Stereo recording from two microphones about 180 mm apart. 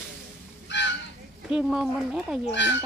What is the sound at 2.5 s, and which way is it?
Speech, 75° left (ahead or behind).